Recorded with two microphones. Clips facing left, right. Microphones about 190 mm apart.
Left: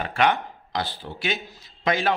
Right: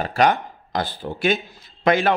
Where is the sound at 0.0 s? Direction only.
40° right (ahead or behind).